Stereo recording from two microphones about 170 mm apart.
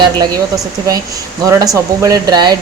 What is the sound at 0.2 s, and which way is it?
A woman's voice, 20° right (ahead or behind).